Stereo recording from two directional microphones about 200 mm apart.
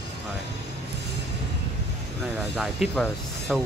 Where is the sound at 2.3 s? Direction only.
Centre (ahead or behind).